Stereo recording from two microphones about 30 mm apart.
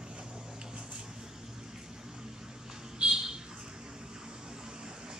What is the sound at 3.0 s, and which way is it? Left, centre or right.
Bird, right.